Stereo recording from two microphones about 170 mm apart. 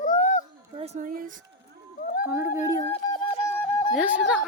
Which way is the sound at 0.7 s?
35° right (ahead or behind).